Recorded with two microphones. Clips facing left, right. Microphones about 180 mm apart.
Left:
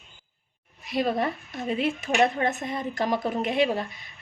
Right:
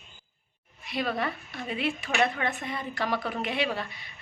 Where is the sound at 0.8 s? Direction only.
45° left (ahead or behind).